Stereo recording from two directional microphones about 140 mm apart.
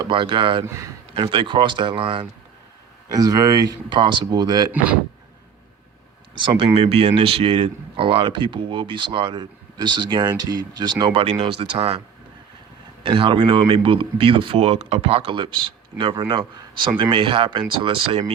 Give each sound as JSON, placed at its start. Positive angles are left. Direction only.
{"t": 0.1, "sound": "speech", "side_deg": -35}
{"t": 3.1, "sound": "speech", "side_deg": -25}
{"t": 6.3, "sound": "a man's voice", "side_deg": -35}